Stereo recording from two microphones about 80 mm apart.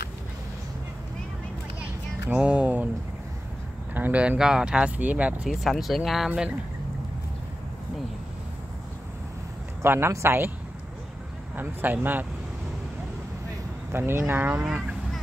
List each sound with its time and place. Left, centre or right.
2.2 s a sound: centre
3.9 s speech: right
5.5 s speech: centre
9.8 s speech: right
11.5 s speech: right
13.9 s speech: right